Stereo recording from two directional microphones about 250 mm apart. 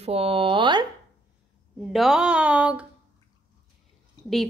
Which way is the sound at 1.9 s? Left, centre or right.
Centre.